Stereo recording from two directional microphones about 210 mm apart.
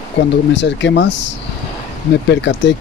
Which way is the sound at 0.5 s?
55° left (ahead or behind).